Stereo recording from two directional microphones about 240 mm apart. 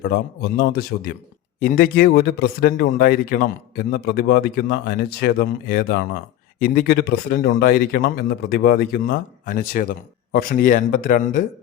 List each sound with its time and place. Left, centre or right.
0.0 s speech: left